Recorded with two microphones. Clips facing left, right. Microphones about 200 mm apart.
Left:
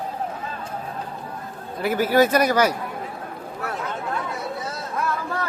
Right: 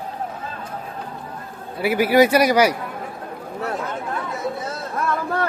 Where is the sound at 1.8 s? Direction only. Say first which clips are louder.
Right 3 dB; 10° right (ahead or behind).